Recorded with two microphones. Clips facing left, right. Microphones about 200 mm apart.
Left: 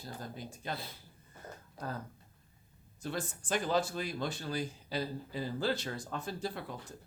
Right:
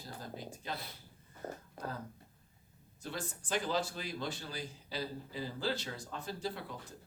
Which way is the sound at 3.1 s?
50° left (ahead or behind).